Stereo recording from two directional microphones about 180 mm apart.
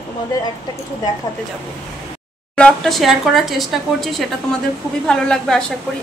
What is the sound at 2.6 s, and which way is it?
A woman's voice, 5° left (ahead or behind).